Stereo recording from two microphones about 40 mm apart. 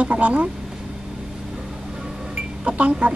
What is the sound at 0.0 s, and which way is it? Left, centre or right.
Speech, right.